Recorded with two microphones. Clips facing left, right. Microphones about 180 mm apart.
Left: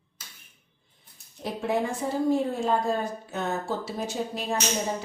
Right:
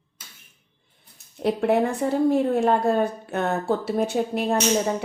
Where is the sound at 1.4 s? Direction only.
65° right (ahead or behind).